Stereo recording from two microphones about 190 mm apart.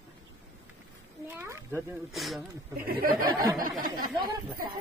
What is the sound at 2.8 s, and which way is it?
Speech, 50° right (ahead or behind).